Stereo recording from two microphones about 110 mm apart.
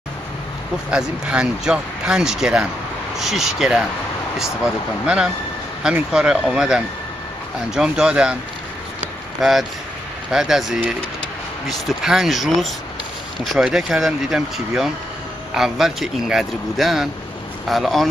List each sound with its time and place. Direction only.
0.8 s speech: 10° right (ahead or behind)
5.0 s speech: 10° right (ahead or behind)
9.4 s speech: centre (ahead or behind)
15.5 s speech: 5° right (ahead or behind)